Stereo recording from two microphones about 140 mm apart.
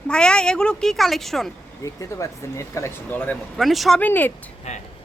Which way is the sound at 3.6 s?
Centre (ahead or behind).